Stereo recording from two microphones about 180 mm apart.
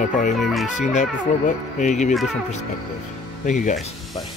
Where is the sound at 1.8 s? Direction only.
40° left (ahead or behind).